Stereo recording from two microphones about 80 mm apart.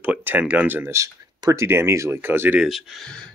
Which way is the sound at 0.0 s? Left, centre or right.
Right.